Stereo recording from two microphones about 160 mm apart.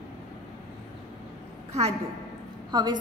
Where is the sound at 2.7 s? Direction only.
25° right (ahead or behind).